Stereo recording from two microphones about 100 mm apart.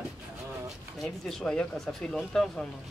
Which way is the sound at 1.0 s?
5° left (ahead or behind).